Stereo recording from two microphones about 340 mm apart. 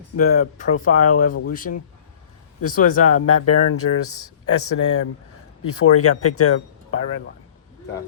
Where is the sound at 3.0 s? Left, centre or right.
Left.